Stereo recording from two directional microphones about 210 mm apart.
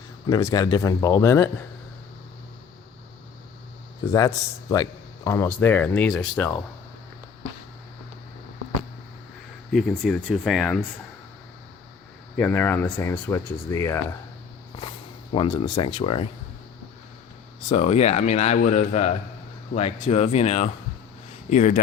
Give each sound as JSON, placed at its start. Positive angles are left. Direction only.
{"t": 0.3, "sound": "speech", "side_deg": 15}
{"t": 4.7, "sound": "speech", "side_deg": 15}
{"t": 9.7, "sound": "speech", "side_deg": 0}
{"t": 12.4, "sound": "speech", "side_deg": 10}
{"t": 14.8, "sound": "speech", "side_deg": 25}
{"t": 17.7, "sound": "speech", "side_deg": 30}